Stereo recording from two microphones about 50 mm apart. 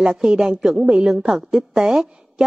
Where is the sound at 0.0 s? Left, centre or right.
Centre.